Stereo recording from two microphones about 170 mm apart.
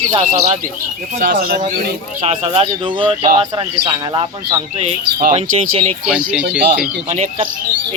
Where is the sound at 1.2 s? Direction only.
55° right (ahead or behind).